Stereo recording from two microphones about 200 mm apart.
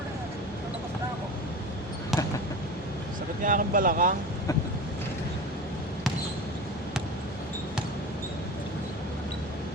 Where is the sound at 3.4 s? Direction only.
40° right (ahead or behind).